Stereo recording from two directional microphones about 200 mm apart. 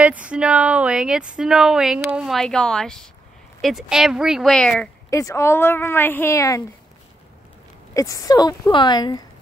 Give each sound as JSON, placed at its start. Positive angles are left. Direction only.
{"t": 0.0, "sound": "speech", "side_deg": -5}
{"t": 5.1, "sound": "a woman's voice", "side_deg": 15}
{"t": 7.9, "sound": "speech", "side_deg": 15}